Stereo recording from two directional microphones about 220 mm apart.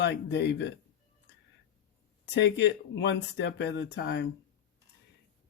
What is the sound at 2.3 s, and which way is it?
Speech, 55° left (ahead or behind).